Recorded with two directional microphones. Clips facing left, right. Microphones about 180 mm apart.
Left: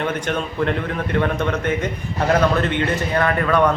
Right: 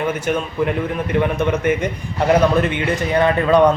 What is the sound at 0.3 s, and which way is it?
A man's voice, 10° right (ahead or behind).